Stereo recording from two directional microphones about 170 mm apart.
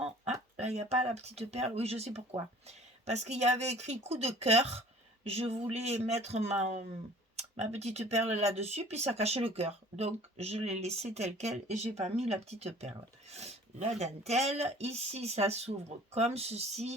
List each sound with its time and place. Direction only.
0.6 s speech: 40° right (ahead or behind)